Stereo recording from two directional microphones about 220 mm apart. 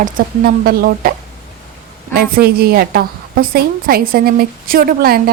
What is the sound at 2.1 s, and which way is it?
A woman's voice, 45° right (ahead or behind).